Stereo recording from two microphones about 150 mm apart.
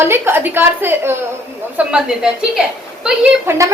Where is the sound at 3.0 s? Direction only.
15° right (ahead or behind).